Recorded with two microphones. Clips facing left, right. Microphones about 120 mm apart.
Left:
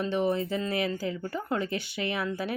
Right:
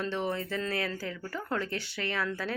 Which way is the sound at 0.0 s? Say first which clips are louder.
Left 5 dB; 15° left (ahead or behind).